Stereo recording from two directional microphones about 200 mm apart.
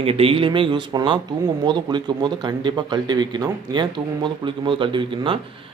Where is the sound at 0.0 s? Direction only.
30° right (ahead or behind).